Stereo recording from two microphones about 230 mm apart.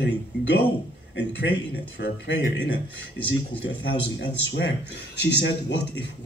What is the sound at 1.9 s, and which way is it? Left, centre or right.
Speech, left.